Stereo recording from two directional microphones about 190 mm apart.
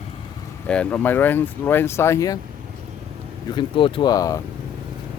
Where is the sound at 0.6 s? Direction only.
5° left (ahead or behind).